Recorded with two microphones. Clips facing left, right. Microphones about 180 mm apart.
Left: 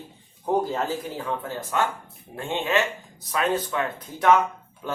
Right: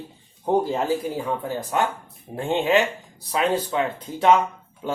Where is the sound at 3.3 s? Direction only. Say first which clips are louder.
Right 2 dB; 25° right (ahead or behind).